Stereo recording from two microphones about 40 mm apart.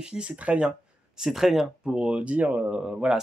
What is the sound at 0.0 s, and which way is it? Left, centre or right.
Speech, right.